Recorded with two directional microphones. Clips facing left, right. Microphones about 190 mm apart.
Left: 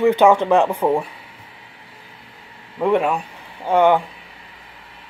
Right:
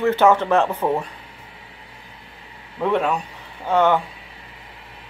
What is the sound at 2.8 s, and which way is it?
Speech, 10° left (ahead or behind).